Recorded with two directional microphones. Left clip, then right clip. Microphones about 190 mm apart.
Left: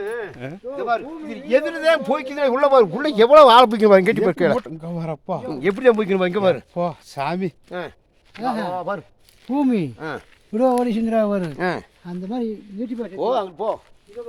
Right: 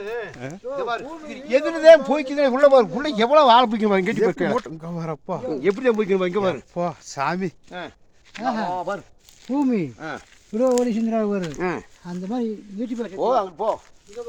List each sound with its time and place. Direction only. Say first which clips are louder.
0.0 s a sound: left 2 dB; 10° left (ahead or behind)
0.3 s speech: left 1 dB; centre (ahead or behind)
1.5 s a man's voice: right 5 dB; 50° left (ahead or behind)
4.6 s speech: left 1 dB; centre (ahead or behind)
5.6 s speech: left 4 dB; 40° left (ahead or behind)
5.9 s speech: left 5 dB; 55° left (ahead or behind)
6.7 s speech: left 1 dB; centre (ahead or behind)
7.7 s speech: left 4 dB; 75° left (ahead or behind)
8.4 s speech: even; 15° right (ahead or behind)
8.7 s speech: left 1 dB; 70° left (ahead or behind)
9.6 s speech: left 2 dB; 25° left (ahead or behind)
10.5 s speech: left 1 dB; 40° left (ahead or behind)
12.0 s speech: even; 30° right (ahead or behind)
13.1 s speech: right 1 dB; 20° right (ahead or behind)